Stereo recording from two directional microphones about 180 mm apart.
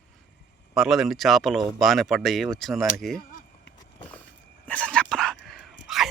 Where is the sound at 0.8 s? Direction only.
Centre (ahead or behind).